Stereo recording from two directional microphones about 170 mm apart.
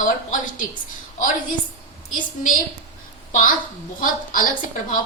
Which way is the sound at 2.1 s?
50° left (ahead or behind).